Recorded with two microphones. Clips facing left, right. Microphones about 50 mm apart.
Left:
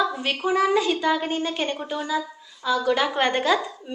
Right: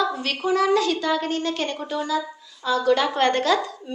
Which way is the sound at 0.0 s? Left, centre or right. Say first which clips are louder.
Even; centre.